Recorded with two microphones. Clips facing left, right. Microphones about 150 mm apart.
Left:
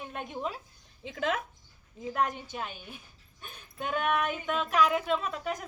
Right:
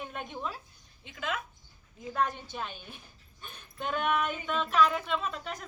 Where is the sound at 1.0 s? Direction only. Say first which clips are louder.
Left 5 dB; 90° left.